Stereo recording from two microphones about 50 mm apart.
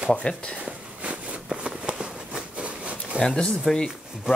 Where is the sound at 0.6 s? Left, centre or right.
Right.